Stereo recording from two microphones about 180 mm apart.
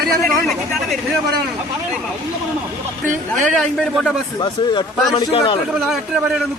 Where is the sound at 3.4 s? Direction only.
Centre (ahead or behind).